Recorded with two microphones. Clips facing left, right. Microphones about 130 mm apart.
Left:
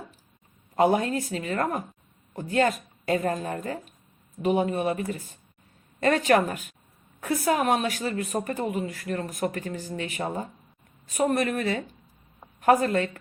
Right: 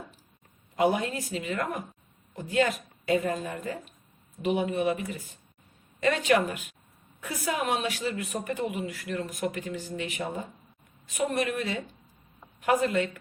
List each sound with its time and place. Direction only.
0.8 s a woman's voice: 45° left (ahead or behind)